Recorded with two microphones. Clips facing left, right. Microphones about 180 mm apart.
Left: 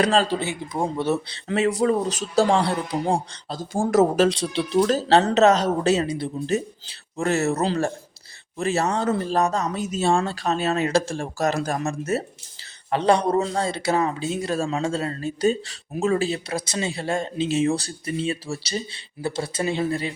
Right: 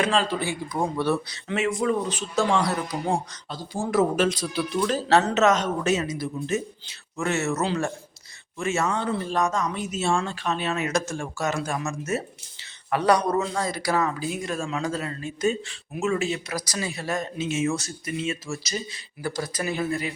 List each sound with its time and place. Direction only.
0.0 s speech: 35° left (ahead or behind)
0.8 s a man's voice: 20° left (ahead or behind)
1.5 s speech: 35° left (ahead or behind)
3.6 s speech: 45° left (ahead or behind); by 4.8 s 30° left (ahead or behind)
4.8 s a man's voice: 40° left (ahead or behind)